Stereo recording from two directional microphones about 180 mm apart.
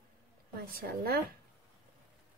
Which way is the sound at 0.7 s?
60° right (ahead or behind).